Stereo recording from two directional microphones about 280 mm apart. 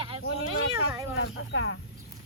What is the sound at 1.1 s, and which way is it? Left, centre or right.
Speech, left.